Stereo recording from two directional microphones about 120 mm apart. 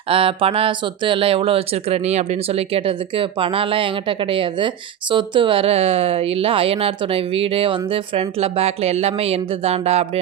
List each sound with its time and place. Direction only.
0.1 s speech: 50° right (ahead or behind)